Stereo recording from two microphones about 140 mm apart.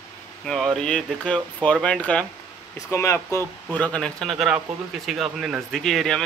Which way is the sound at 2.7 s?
20° left (ahead or behind).